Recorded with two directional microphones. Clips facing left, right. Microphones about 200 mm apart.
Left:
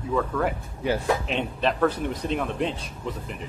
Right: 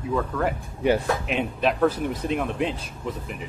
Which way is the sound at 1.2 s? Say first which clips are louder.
Right 2 dB; 5° right (ahead or behind).